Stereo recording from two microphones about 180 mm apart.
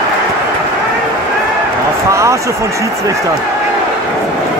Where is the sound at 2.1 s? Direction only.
15° right (ahead or behind).